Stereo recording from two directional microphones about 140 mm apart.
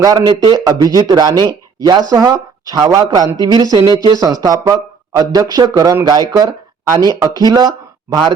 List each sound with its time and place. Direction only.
0.0 s speech: 25° right (ahead or behind)